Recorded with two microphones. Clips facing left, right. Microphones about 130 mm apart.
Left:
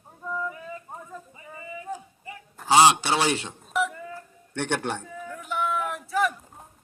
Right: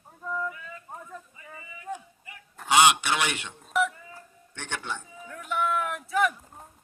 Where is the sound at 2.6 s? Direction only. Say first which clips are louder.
Left 3 dB; 30° left (ahead or behind).